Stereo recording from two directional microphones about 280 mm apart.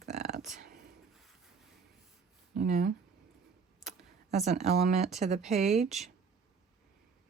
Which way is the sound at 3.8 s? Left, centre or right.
Right.